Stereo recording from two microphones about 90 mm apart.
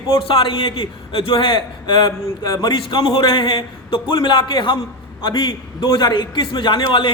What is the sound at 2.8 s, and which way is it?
A man's voice, 60° left (ahead or behind).